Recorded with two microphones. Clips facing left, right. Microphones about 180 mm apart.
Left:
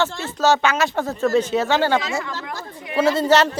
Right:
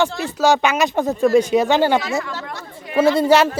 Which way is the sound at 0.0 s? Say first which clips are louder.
Right 2 dB; 15° right (ahead or behind).